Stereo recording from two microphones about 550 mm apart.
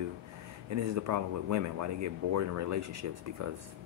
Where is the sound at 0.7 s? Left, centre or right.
Right.